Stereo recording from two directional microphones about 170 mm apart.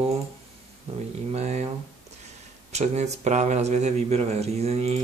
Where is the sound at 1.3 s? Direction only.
40° right (ahead or behind).